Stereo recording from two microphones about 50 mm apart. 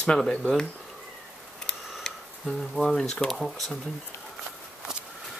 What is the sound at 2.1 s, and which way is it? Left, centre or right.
Tick-tock, centre.